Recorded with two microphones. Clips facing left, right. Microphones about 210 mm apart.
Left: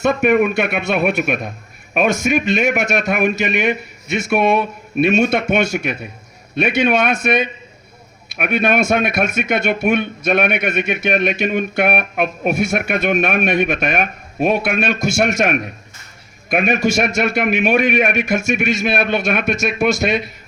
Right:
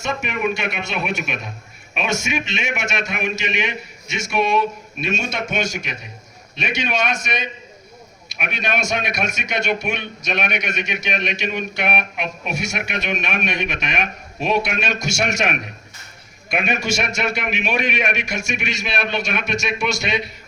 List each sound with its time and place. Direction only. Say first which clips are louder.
0.0 s a man's voice: left 9 dB; 55° left (ahead or behind)